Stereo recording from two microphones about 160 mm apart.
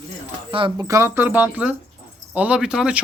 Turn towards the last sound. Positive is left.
turn(degrees=-5)  # may be behind; listen again after turning